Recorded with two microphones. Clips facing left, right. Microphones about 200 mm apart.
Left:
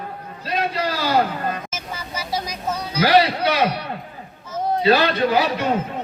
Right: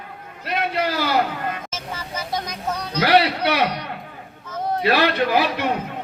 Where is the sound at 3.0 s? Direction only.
65° right (ahead or behind).